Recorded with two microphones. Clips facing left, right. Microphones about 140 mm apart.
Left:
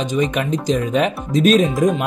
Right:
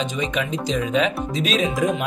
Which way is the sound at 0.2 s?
50° left (ahead or behind).